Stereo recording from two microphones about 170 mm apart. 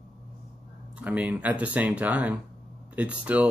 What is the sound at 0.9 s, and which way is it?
Speech, 10° right (ahead or behind).